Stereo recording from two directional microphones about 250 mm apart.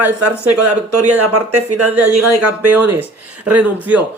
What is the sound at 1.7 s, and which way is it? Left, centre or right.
Speech, right.